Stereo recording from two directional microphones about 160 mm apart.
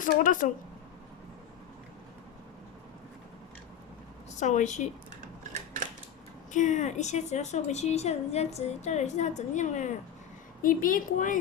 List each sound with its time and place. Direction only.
0.0 s a woman's voice: 55° left (ahead or behind)
4.4 s a woman's voice: 50° left (ahead or behind)
5.4 s a sound: 50° right (ahead or behind)
6.5 s a woman's voice: 50° left (ahead or behind)
10.6 s a woman's voice: 60° left (ahead or behind)